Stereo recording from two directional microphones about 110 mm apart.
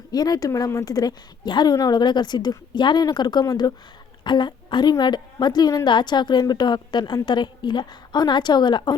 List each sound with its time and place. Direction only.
0.1 s a woman's voice: 35° left (ahead or behind)